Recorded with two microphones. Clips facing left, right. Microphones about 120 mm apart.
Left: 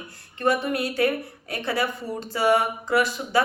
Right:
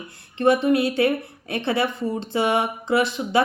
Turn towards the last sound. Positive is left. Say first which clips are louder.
# right 2 dB
turn(degrees=-25)  # may be behind; listen again after turning